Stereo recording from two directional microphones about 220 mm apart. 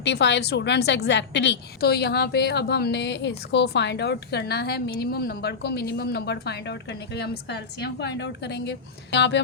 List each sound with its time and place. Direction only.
0.0 s a woman's voice: 50° left (ahead or behind)